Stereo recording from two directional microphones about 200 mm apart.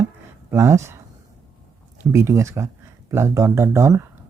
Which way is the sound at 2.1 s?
15° right (ahead or behind).